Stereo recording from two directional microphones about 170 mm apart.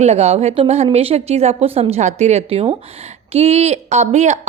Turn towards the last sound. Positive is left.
turn(degrees=-40)  # may be behind; listen again after turning